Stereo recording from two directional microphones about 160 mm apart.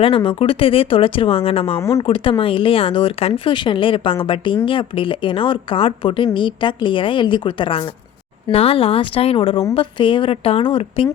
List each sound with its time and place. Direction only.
0.0 s speech: 35° left (ahead or behind)